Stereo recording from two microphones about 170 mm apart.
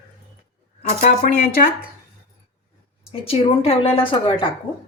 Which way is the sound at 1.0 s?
50° left (ahead or behind).